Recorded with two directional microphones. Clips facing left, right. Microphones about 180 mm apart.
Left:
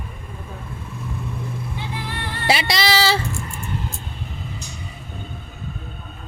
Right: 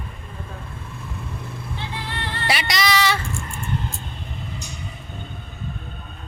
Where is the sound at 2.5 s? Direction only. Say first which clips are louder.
Left 3 dB; 30° left (ahead or behind).